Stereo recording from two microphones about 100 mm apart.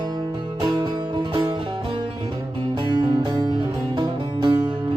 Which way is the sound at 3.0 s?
45° right (ahead or behind).